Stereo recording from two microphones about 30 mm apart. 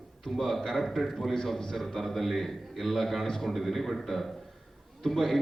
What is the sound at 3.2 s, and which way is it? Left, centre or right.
Speech, centre.